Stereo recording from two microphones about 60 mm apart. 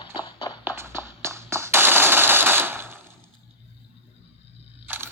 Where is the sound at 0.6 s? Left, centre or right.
Right.